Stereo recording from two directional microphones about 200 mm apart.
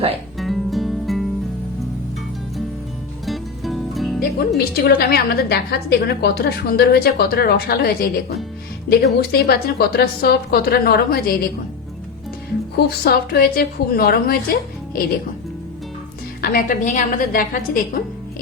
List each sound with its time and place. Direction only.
0.3 s music: centre (ahead or behind)
3.2 s music: centre (ahead or behind)
4.2 s a woman's voice: 50° left (ahead or behind)
12.7 s a woman's voice: 50° left (ahead or behind)
16.4 s a woman's voice: 45° left (ahead or behind)